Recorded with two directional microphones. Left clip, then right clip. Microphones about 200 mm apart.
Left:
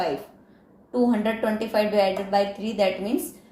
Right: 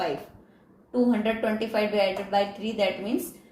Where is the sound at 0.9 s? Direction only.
20° left (ahead or behind).